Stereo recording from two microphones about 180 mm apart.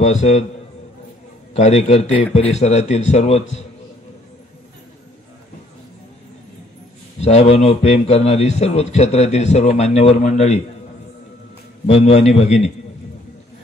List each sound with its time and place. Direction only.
0.0 s a man's voice: 40° left (ahead or behind)
1.5 s a man's voice: 35° left (ahead or behind)
7.2 s a man's voice: 35° left (ahead or behind)
11.8 s a man's voice: 35° left (ahead or behind)